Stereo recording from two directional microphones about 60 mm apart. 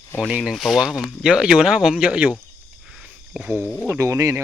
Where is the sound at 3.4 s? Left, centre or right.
Right.